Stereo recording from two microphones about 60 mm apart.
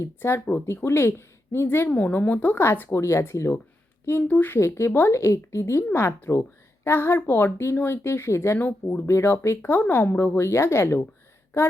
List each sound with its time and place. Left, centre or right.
0.2 s speech: left
1.9 s a woman's voice: left
2.6 s speech: left
4.0 s speech: left
4.5 s a woman's voice: left
5.9 s speech: left
8.5 s speech: left
9.0 s speech: left
9.6 s speech: left
10.4 s speech: left